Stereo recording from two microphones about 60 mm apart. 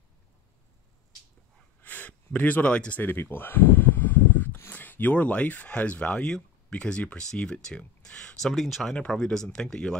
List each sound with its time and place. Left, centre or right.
1.8 s a sound: left
3.0 s speech: left; by 8.4 s centre
8.5 s speech: centre
8.9 s speech: centre